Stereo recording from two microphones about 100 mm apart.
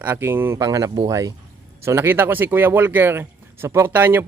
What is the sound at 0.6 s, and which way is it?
Speech, 40° right (ahead or behind).